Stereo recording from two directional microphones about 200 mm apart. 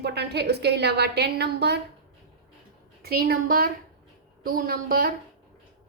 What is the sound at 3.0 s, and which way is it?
A woman's voice, 50° right (ahead or behind).